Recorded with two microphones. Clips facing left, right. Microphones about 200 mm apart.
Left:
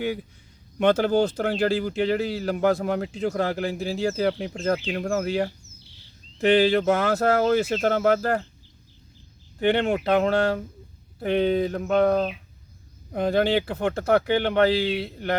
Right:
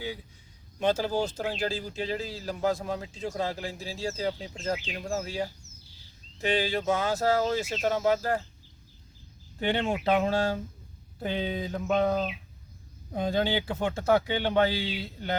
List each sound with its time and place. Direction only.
0.8 s speech: 65° left (ahead or behind)
9.6 s speech: 65° left (ahead or behind)